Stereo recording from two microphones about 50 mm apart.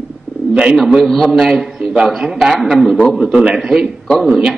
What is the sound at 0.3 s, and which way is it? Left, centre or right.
Bird, left.